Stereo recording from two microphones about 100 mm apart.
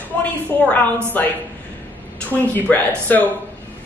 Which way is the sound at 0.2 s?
15° left (ahead or behind).